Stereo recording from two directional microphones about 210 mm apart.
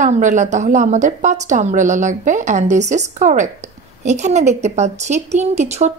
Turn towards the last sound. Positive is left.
turn(degrees=-30)  # may be behind; listen again after turning